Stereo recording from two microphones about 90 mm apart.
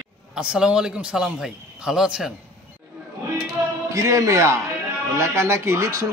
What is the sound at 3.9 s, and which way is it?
Speech, 35° right (ahead or behind).